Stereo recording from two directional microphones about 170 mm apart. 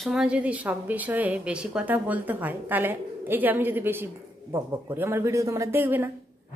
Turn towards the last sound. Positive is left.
turn(degrees=-10)  # may be behind; listen again after turning